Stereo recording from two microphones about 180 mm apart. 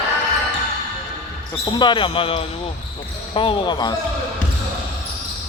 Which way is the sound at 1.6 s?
25° left (ahead or behind).